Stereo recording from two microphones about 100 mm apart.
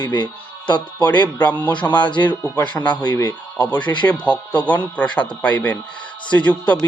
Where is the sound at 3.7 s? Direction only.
50° left (ahead or behind).